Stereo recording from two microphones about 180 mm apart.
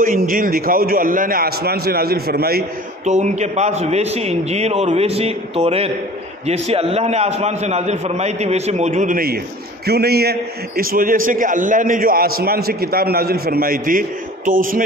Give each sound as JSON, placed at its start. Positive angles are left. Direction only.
{"t": 0.0, "sound": "a man's voice", "side_deg": -50}
{"t": 3.1, "sound": "a man's voice", "side_deg": -40}